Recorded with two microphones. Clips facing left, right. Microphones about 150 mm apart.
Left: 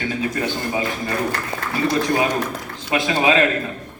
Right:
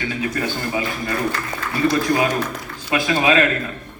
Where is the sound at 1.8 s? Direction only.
20° left (ahead or behind).